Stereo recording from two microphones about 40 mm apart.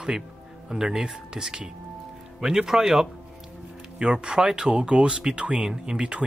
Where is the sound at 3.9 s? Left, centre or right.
Right.